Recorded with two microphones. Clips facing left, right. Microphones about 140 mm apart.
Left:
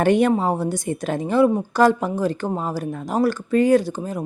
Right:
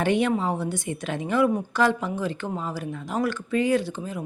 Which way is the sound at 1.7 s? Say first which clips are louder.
Left 6 dB; 40° left (ahead or behind).